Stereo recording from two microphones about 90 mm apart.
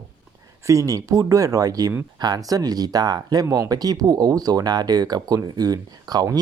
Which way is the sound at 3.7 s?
45° right (ahead or behind).